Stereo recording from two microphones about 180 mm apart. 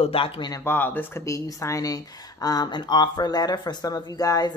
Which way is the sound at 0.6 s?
10° left (ahead or behind).